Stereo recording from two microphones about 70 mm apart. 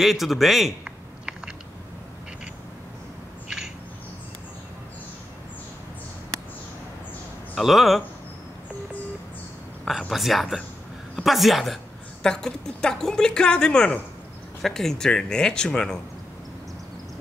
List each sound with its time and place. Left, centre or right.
0.0 s speech: centre
3.4 s a sound: centre
7.5 s speech: centre
9.8 s a woman's voice: centre